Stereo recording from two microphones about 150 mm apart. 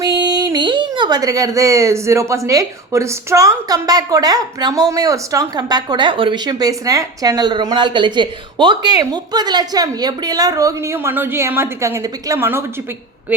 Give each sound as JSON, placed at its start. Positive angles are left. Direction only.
{"t": 0.0, "sound": "speech", "side_deg": -25}